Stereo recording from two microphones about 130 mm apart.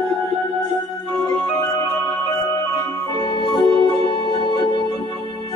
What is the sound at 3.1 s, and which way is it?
Music, 35° left (ahead or behind).